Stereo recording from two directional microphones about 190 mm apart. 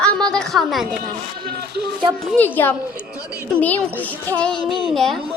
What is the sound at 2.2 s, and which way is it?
A child's voice, 5° left (ahead or behind).